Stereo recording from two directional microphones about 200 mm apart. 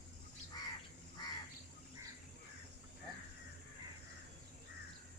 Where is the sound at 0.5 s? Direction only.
20° left (ahead or behind).